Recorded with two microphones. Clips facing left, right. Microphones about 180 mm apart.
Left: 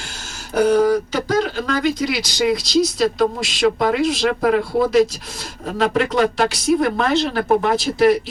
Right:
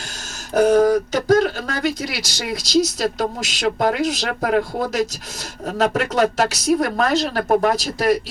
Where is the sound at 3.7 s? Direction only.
45° right (ahead or behind).